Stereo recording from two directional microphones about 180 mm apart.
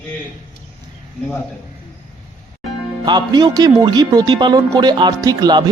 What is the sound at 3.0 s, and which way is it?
Speech, 25° right (ahead or behind).